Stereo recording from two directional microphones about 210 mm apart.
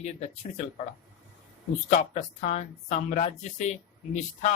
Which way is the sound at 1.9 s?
35° left (ahead or behind).